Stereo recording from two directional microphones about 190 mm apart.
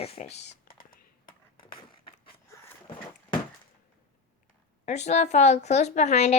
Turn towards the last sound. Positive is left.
turn(degrees=35)  # may be behind; listen again after turning